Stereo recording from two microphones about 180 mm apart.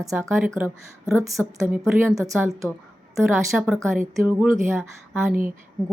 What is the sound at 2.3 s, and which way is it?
Speech, 15° right (ahead or behind).